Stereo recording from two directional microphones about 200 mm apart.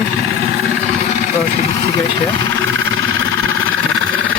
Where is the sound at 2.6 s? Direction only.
75° right (ahead or behind).